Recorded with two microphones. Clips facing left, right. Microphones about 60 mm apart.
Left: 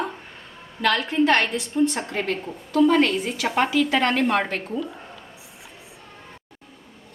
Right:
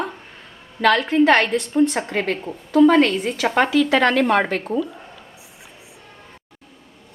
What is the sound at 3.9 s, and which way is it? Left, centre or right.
Speech, right.